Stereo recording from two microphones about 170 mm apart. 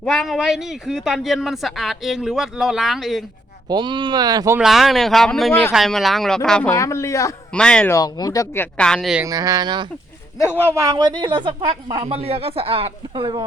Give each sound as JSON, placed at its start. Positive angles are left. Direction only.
{"t": 0.0, "sound": "speech", "side_deg": 5}
{"t": 3.7, "sound": "speech", "side_deg": -25}
{"t": 4.5, "sound": "speech", "side_deg": 0}
{"t": 6.7, "sound": "speech", "side_deg": 15}
{"t": 7.5, "sound": "speech", "side_deg": 5}
{"t": 7.9, "sound": "speech", "side_deg": 20}
{"t": 9.2, "sound": "speech", "side_deg": -20}
{"t": 10.3, "sound": "a man's voice", "side_deg": 20}
{"t": 10.6, "sound": "speech", "side_deg": -15}